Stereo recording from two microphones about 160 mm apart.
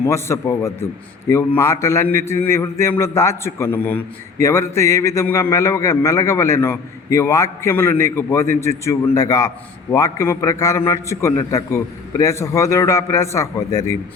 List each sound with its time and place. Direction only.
0.0 s a man's voice: 15° left (ahead or behind)